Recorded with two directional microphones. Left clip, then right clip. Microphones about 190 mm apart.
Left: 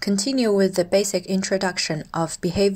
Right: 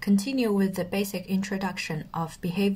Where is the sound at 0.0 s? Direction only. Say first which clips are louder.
Left 5 dB; 35° left (ahead or behind).